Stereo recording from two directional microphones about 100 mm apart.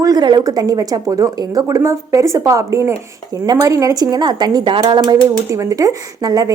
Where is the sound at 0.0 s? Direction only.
45° right (ahead or behind).